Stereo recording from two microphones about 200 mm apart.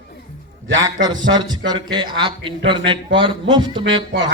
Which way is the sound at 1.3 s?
20° right (ahead or behind).